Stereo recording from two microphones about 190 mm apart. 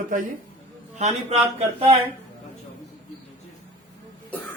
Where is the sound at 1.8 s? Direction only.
30° right (ahead or behind).